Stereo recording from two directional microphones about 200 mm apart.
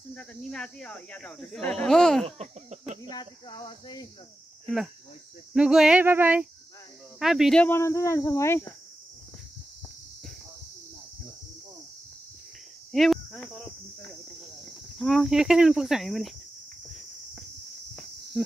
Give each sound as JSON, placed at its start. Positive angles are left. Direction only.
{"t": 0.1, "sound": "speech", "side_deg": 5}
{"t": 2.2, "sound": "speech", "side_deg": -30}
{"t": 3.0, "sound": "speech", "side_deg": 20}
{"t": 5.5, "sound": "speech", "side_deg": -5}
{"t": 12.9, "sound": "speech", "side_deg": 0}
{"t": 15.0, "sound": "speech", "side_deg": 0}